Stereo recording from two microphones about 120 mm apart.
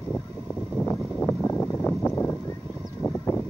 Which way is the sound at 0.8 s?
10° left (ahead or behind).